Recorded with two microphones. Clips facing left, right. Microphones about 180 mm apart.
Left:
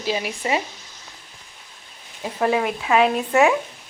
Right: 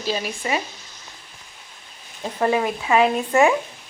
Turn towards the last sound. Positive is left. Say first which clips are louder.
# even
turn(degrees=5)  # may be behind; listen again after turning